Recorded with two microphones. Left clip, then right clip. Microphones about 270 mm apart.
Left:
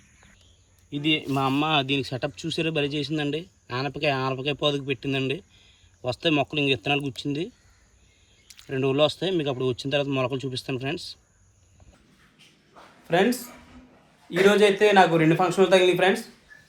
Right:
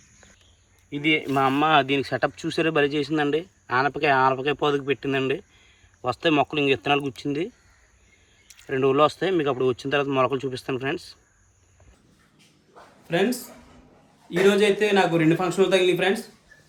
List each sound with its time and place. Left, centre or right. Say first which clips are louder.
0.9 s speech: right 2 dB; centre
8.4 s a sound: right 3 dB; centre
8.7 s speech: right 3 dB; centre
13.1 s speech: left 2 dB; centre